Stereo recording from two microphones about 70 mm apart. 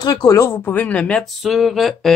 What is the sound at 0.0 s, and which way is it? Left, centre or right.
Speech, left.